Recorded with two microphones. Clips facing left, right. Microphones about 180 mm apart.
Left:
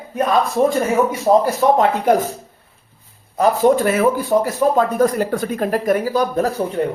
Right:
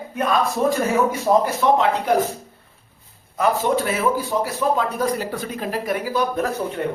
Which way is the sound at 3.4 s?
45° left (ahead or behind).